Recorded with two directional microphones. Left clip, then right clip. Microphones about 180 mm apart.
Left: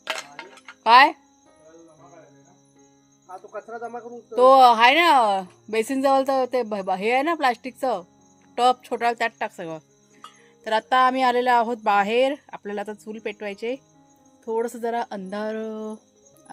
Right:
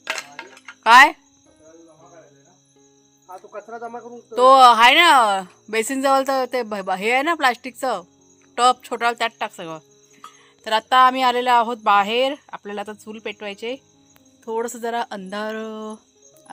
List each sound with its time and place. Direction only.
0.0 s music: 40° right (ahead or behind)
0.9 s a woman's voice: centre (ahead or behind)
3.5 s speech: 40° right (ahead or behind)
4.4 s a woman's voice: 5° left (ahead or behind)